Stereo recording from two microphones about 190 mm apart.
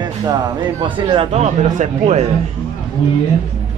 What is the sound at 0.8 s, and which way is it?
Speech, 25° right (ahead or behind).